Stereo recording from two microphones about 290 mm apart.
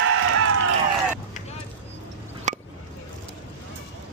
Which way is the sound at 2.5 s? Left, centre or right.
Right.